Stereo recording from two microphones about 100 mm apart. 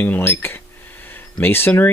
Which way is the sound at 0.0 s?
20° left (ahead or behind).